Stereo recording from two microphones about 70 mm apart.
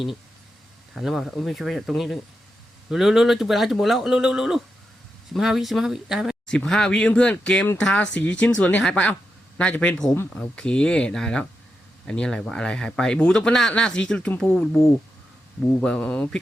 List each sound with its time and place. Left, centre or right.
0.9 s speech: centre
6.5 s speech: centre